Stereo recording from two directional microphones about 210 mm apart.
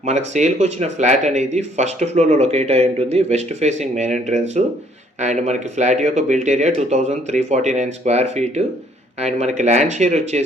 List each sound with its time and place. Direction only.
0.0 s speech: 35° right (ahead or behind)